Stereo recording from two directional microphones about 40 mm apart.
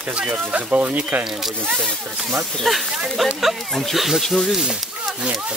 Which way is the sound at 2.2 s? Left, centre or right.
Centre.